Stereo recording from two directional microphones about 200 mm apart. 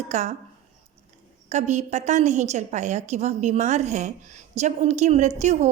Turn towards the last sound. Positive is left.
turn(degrees=-35)  # may be behind; listen again after turning